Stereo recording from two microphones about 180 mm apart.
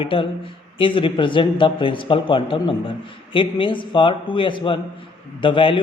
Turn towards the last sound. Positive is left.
turn(degrees=30)  # may be behind; listen again after turning